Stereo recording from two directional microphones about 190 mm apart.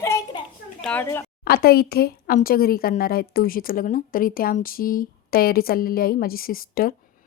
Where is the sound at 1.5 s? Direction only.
55° left (ahead or behind).